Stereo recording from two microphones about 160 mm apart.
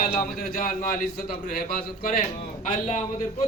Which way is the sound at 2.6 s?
50° left (ahead or behind).